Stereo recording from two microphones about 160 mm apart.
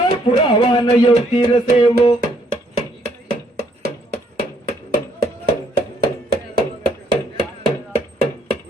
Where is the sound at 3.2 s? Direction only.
80° right.